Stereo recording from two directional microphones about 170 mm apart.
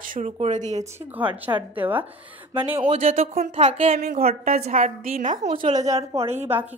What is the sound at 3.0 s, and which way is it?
Speech, 45° right (ahead or behind).